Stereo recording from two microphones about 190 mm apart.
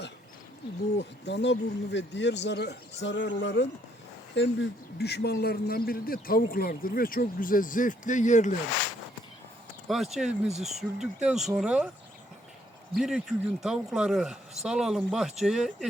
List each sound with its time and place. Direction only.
0.9 s a man's voice: 65° left (ahead or behind); by 8.5 s 40° left (ahead or behind)
9.9 s speech: centre (ahead or behind)
13.0 s speech: centre (ahead or behind)